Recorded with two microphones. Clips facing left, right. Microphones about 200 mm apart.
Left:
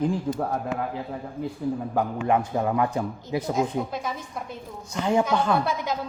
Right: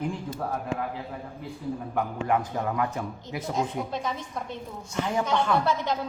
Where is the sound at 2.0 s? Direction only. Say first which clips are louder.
Left 2 dB; 25° left (ahead or behind).